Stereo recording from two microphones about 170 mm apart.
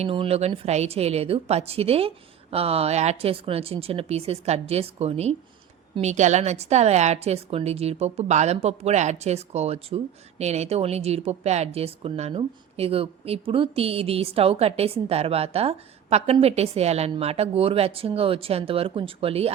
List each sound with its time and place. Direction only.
0.0 s a woman's voice: 35° right (ahead or behind)